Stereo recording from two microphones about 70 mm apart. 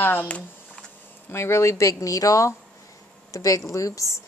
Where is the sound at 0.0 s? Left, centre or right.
Left.